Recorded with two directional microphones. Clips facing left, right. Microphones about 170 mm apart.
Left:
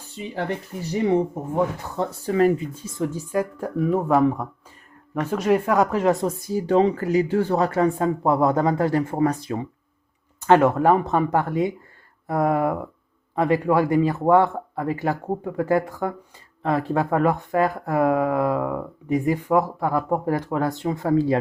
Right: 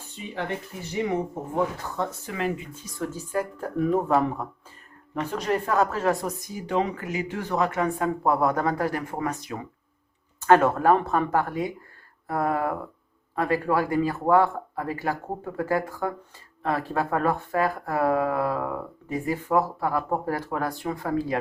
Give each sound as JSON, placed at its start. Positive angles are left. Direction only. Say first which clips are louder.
{"t": 0.3, "sound": "speech", "louder": "left 3 dB", "side_deg": 35}
{"t": 3.8, "sound": "speech", "louder": "left 3 dB", "side_deg": 5}
{"t": 6.5, "sound": "speech", "louder": "left 8 dB", "side_deg": 35}
{"t": 10.4, "sound": "speech", "louder": "left 2 dB", "side_deg": 15}